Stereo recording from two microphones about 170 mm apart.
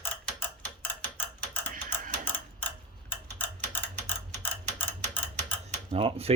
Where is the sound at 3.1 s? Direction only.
10° left (ahead or behind).